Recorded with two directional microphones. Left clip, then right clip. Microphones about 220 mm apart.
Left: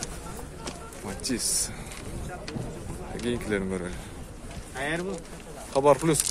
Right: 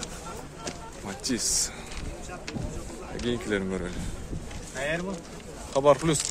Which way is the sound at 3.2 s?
Centre (ahead or behind).